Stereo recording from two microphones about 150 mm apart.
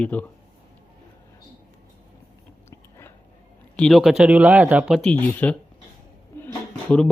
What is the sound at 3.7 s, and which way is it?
Speech, 5° left (ahead or behind).